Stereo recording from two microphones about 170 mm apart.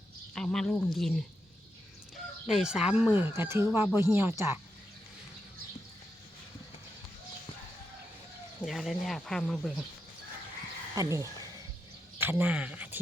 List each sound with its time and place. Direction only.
0.3 s speech: 5° left (ahead or behind)
2.5 s speech: 5° right (ahead or behind)
8.6 s speech: centre (ahead or behind)
10.9 s speech: 20° right (ahead or behind)